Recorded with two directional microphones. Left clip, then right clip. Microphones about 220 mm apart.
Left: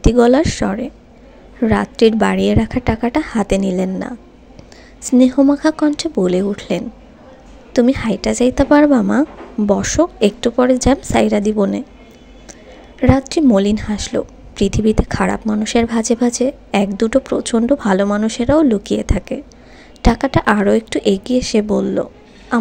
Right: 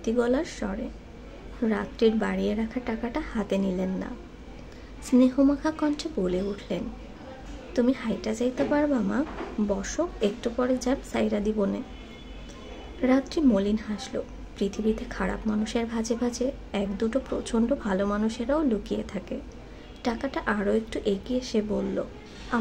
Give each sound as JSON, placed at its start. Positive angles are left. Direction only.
{"t": 0.0, "sound": "a woman's voice", "side_deg": 35}
{"t": 13.0, "sound": "a woman's voice", "side_deg": 35}